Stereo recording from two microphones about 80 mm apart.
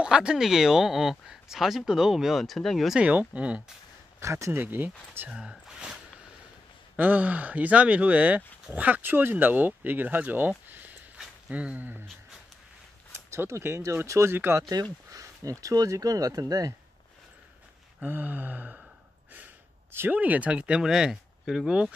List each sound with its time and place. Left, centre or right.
0.0 s speech: centre
3.0 s speech: centre
4.2 s speech: right
5.3 s speech: centre
7.0 s speech: centre
10.7 s a sound: right
11.1 s speech: centre
13.1 s speech: right
14.7 s speech: right
18.0 s speech: right
20.1 s speech: centre